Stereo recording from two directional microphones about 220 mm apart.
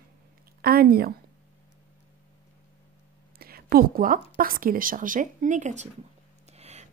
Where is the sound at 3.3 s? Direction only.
45° right (ahead or behind).